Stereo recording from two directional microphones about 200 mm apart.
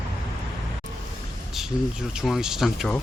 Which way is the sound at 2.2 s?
Centre (ahead or behind).